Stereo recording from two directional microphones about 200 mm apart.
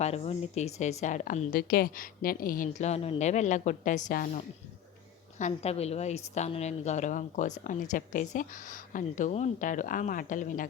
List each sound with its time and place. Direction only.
0.0 s a woman's voice: 30° left (ahead or behind)